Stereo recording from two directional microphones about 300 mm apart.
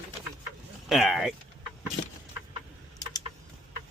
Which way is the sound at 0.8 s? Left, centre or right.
Centre.